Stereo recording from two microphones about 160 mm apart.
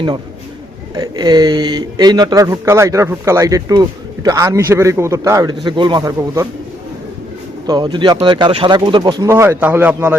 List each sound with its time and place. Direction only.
0.9 s speech: 25° right (ahead or behind)
7.7 s speech: 25° right (ahead or behind)
9.3 s a man's voice: 15° right (ahead or behind)